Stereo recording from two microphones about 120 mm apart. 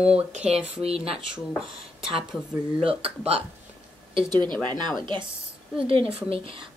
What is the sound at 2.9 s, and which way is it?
Speech, 55° right (ahead or behind).